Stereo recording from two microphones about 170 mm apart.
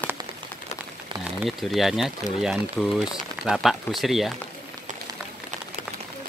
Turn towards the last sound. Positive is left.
turn(degrees=0)  # may be behind; listen again after turning